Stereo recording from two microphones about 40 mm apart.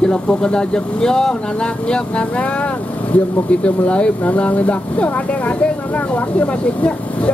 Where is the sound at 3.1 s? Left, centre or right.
Left.